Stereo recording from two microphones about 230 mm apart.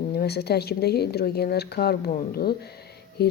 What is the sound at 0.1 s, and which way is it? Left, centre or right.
Speech, left.